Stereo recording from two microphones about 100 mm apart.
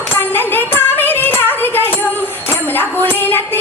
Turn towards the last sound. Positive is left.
turn(degrees=20)  # may be behind; listen again after turning